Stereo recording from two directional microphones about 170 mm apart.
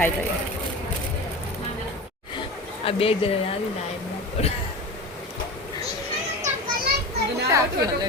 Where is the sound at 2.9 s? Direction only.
35° left (ahead or behind).